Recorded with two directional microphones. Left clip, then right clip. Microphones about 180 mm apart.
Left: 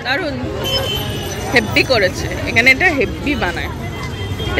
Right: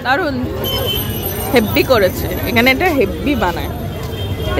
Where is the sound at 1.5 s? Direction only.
20° right (ahead or behind).